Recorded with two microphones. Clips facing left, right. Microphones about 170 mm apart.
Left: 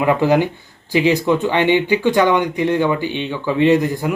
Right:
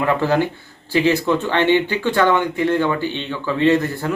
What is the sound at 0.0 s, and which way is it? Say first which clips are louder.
Speech: left 3 dB; 15° left (ahead or behind).